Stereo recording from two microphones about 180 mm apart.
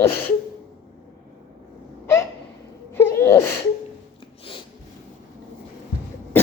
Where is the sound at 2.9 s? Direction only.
10° left (ahead or behind).